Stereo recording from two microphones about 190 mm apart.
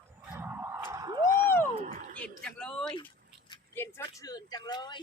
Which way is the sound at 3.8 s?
15° left (ahead or behind).